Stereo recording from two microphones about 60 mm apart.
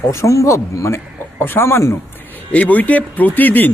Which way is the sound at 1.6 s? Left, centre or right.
Left.